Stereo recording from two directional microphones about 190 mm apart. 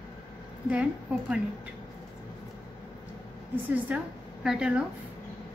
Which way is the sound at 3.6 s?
5° right (ahead or behind).